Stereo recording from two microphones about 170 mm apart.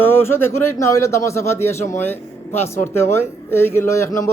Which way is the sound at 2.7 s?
15° left (ahead or behind).